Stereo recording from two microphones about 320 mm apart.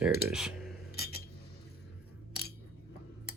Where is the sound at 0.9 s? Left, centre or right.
Left.